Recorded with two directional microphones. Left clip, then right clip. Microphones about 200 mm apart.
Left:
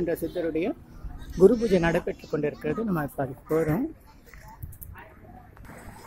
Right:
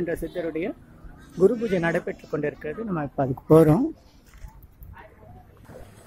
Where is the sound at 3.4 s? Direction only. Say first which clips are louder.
Right 10 dB; 35° right (ahead or behind).